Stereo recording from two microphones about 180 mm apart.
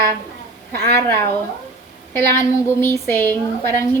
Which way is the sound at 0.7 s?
60° right (ahead or behind).